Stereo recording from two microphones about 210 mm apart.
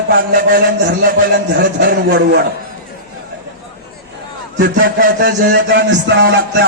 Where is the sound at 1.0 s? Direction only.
50° right (ahead or behind).